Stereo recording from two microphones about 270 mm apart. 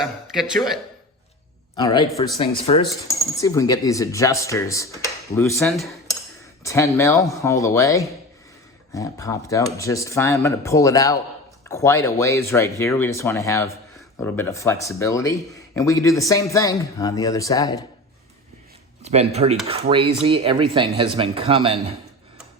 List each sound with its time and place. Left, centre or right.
0.0 s speech: centre
1.7 s speech: centre
19.0 s speech: right